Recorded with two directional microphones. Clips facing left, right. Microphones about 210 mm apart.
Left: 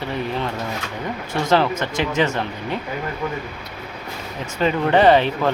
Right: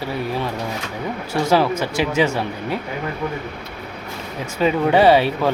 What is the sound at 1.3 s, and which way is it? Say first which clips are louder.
Speech: right 1 dB; 10° right (ahead or behind).